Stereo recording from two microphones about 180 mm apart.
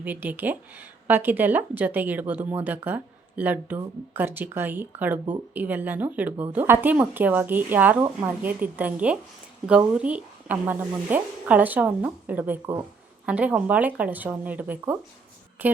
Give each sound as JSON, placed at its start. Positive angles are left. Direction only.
{"t": 0.0, "sound": "a woman's voice", "side_deg": -10}